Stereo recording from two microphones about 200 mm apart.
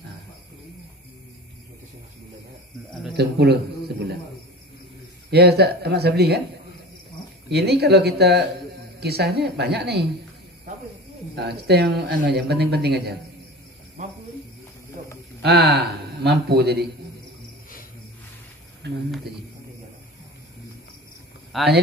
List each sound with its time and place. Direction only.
2.9 s speech: centre (ahead or behind)
3.2 s a man's voice: 55° right (ahead or behind)
5.3 s speech: 55° right (ahead or behind)
7.4 s speech: 55° right (ahead or behind)
11.3 s a man's voice: 55° right (ahead or behind)
15.4 s speech: 50° right (ahead or behind)
18.8 s a man's voice: 55° right (ahead or behind)
21.5 s a man's voice: centre (ahead or behind)